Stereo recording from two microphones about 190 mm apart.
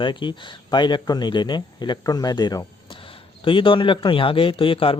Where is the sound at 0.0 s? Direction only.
25° left (ahead or behind).